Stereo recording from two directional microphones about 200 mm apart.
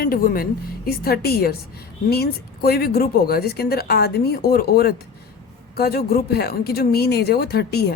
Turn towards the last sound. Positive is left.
turn(degrees=55)  # may be behind; listen again after turning